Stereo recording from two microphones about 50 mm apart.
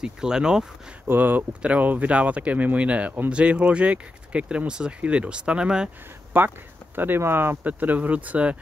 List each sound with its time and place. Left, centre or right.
0.0 s speech: centre
1.0 s speech: right; by 5.9 s centre
6.3 s speech: right
7.6 s speech: right